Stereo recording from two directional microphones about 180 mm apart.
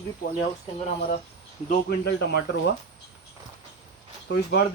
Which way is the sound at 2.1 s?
70° left (ahead or behind).